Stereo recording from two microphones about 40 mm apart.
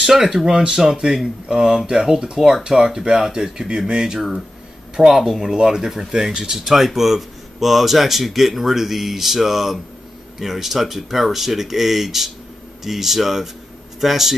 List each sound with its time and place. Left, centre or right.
0.0 s speech: centre
0.5 s speech: centre
5.0 s speech: centre